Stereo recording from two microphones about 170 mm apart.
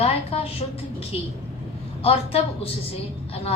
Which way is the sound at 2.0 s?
35° left (ahead or behind).